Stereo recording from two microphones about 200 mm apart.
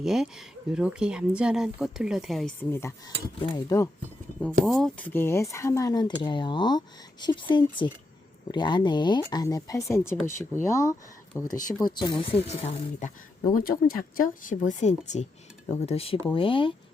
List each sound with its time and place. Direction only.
0.0 s speech: centre (ahead or behind)
3.4 s speech: 20° left (ahead or behind)
4.6 s speech: centre (ahead or behind); by 13.1 s 30° left (ahead or behind)
13.5 s speech: 45° left (ahead or behind); by 16.7 s 25° left (ahead or behind)